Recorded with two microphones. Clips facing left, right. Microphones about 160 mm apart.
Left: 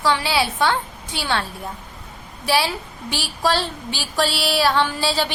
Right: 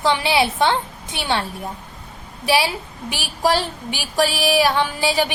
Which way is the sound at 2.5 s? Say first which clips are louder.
Right 1 dB; 15° right (ahead or behind).